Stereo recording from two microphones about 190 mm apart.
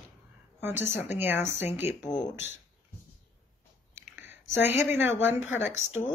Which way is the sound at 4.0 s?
10° right (ahead or behind).